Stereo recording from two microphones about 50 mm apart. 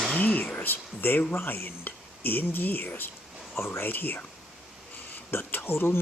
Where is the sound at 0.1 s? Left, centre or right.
Left.